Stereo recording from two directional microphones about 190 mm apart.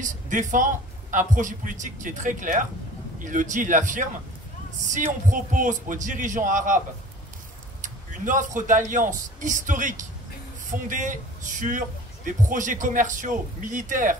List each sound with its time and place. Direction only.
0.0 s speech: 45° right (ahead or behind)
7.8 s speech: 45° right (ahead or behind)